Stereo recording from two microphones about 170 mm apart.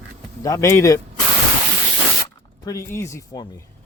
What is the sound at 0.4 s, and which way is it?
Speech, 20° left (ahead or behind).